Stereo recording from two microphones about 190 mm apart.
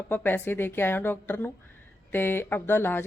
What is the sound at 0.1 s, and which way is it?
Speech, 10° left (ahead or behind).